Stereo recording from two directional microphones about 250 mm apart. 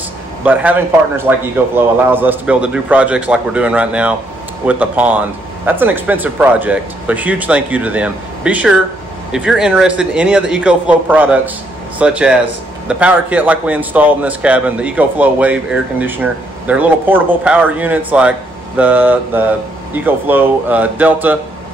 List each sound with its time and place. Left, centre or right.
0.4 s a man's voice: centre